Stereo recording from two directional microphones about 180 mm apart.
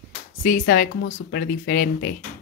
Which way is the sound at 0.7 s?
50° left (ahead or behind).